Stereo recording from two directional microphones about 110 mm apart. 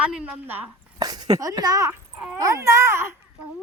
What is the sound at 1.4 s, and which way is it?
Speech, 35° right (ahead or behind).